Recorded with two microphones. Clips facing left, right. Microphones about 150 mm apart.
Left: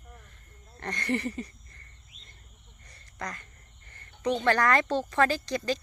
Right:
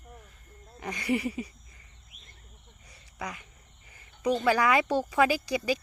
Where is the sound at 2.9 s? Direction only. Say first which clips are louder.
Even; 5° right (ahead or behind).